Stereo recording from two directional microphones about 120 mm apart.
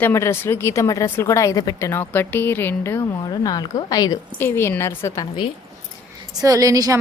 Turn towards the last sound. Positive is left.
turn(degrees=-30)  # may be behind; listen again after turning